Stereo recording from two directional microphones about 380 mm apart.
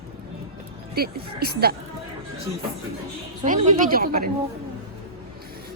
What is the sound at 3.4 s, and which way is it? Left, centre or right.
Speech, centre.